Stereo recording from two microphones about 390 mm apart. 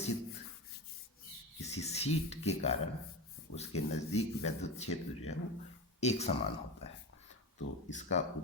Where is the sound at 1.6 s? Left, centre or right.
Centre.